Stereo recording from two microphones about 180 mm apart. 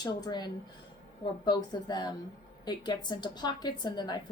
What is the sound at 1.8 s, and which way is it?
A woman's voice, 25° left (ahead or behind).